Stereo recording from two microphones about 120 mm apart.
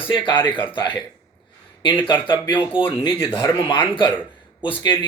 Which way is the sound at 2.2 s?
40° left (ahead or behind).